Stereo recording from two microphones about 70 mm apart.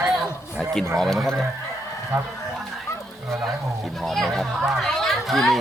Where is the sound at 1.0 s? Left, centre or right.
Centre.